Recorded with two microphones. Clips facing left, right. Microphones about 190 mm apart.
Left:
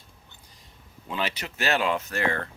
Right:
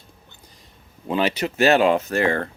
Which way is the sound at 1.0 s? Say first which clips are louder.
Right 9 dB; 45° right (ahead or behind).